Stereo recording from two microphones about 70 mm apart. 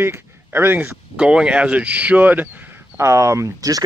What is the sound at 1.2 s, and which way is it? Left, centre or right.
Speech, centre.